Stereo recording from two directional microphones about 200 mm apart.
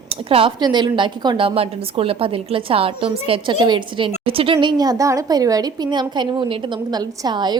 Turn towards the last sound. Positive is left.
turn(degrees=-20)  # may be behind; listen again after turning